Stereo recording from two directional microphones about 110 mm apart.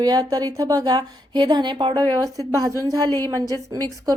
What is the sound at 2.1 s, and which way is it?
A woman's voice, 35° right (ahead or behind).